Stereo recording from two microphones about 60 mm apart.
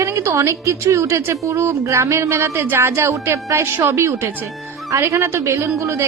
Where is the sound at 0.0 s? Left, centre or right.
Right.